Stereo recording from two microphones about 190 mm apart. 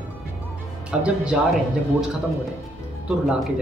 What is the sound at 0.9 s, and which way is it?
Speech, 5° right (ahead or behind).